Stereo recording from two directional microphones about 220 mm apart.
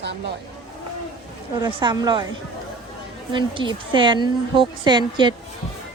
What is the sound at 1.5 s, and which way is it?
Speech, 20° right (ahead or behind).